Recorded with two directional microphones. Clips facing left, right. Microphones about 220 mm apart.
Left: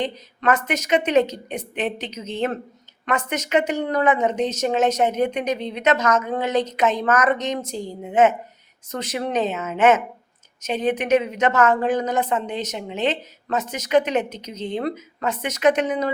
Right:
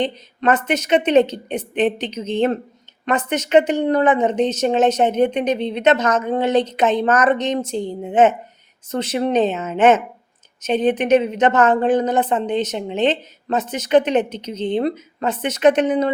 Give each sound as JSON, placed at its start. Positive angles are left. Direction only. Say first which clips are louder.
{"t": 0.0, "sound": "speech", "louder": "right 3 dB", "side_deg": -30}